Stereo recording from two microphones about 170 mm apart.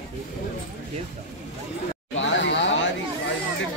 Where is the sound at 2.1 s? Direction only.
90° left.